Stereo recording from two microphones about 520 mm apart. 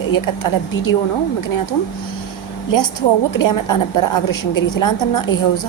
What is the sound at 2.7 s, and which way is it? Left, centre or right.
A woman's voice, left.